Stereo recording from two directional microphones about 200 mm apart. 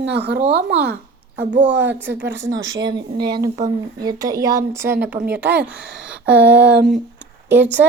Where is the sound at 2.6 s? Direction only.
20° right (ahead or behind).